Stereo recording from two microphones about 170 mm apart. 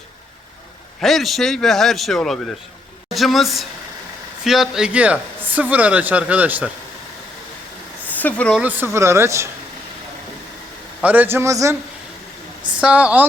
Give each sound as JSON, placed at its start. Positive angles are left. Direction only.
{"t": 1.0, "sound": "a woman's voice", "side_deg": 0}
{"t": 8.0, "sound": "a sound", "side_deg": 10}
{"t": 8.5, "sound": "speech", "side_deg": -10}
{"t": 11.0, "sound": "speech", "side_deg": -10}
{"t": 12.7, "sound": "speech", "side_deg": -5}